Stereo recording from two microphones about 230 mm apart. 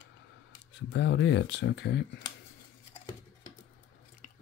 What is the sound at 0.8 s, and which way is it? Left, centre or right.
Speech, left.